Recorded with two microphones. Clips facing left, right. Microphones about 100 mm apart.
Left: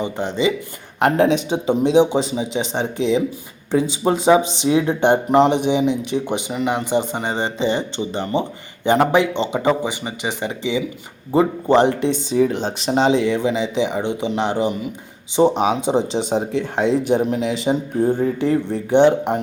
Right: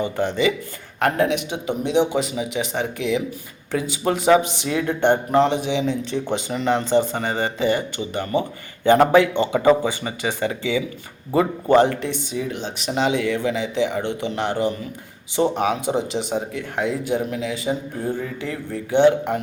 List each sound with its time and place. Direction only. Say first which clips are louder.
0.0 s speech: even; 20° left (ahead or behind)
12.4 s speech: left 9 dB; 35° left (ahead or behind); by 19.4 s 20° left (ahead or behind)